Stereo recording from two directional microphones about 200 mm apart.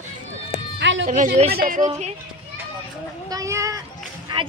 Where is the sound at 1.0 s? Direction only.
40° right (ahead or behind).